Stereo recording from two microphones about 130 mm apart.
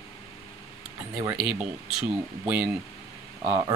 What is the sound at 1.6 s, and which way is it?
Speech, 10° right (ahead or behind).